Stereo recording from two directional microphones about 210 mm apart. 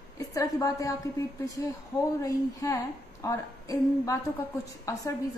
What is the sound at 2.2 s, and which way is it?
A woman's voice, 15° left (ahead or behind).